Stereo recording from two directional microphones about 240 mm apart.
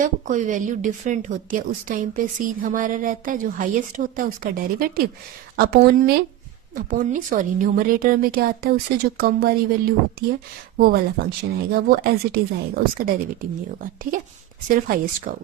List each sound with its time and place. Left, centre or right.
0.0 s speech: right
14.7 s speech: right